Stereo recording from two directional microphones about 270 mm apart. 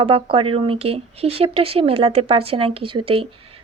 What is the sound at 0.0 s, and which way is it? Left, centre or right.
Speech, centre.